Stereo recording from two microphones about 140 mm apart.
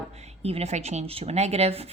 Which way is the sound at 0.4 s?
45° right (ahead or behind).